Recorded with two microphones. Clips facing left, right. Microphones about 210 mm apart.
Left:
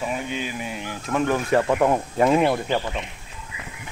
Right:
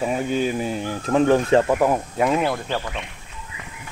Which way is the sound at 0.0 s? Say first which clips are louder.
Right 6 dB; 40° right (ahead or behind).